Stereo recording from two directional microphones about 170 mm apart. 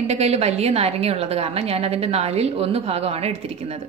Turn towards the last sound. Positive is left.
turn(degrees=-40)  # may be behind; listen again after turning